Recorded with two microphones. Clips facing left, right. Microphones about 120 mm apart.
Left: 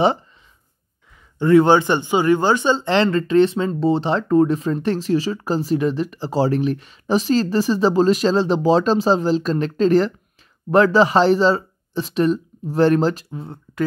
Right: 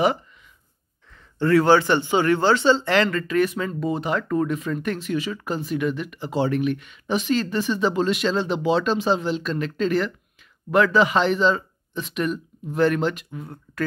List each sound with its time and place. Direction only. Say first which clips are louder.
1.4 s speech: left 3 dB; 20° left (ahead or behind)
2.9 s speech: left 4 dB; 30° left (ahead or behind)